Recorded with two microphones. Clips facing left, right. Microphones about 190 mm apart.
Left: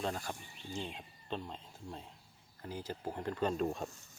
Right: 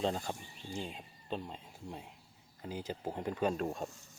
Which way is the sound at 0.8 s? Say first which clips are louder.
Even; 10° right (ahead or behind).